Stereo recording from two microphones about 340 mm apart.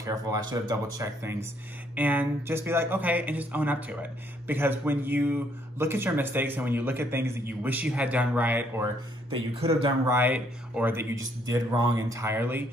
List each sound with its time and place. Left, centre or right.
0.0 s speech: centre
9.3 s speech: centre